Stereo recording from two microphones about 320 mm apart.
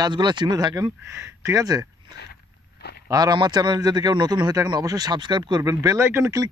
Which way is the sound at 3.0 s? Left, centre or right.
Centre.